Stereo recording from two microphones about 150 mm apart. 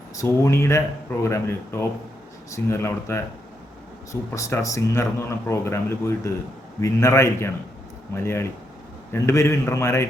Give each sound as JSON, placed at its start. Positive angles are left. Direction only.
{"t": 0.2, "sound": "speech", "side_deg": 20}